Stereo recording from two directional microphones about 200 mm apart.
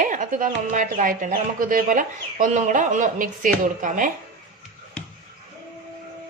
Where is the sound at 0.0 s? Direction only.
40° right (ahead or behind).